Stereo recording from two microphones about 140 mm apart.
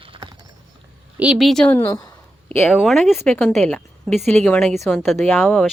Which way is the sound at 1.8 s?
25° left (ahead or behind).